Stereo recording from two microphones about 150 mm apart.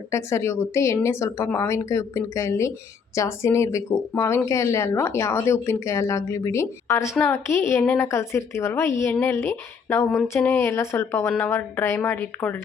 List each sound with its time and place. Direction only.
0.1 s a woman's voice: 20° left (ahead or behind)